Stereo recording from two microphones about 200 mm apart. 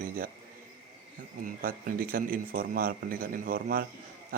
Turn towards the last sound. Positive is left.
turn(degrees=-45)  # may be behind; listen again after turning